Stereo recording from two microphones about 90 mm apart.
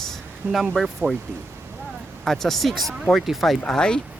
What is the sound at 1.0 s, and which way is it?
Speech, 25° right (ahead or behind).